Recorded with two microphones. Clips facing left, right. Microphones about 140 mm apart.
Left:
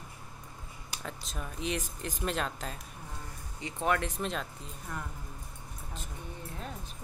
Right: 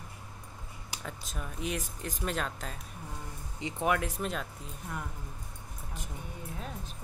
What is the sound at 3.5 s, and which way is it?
Speech, 15° right (ahead or behind).